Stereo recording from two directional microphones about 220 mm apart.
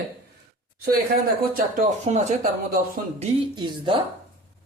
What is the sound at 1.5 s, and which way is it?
Speech, 35° right (ahead or behind).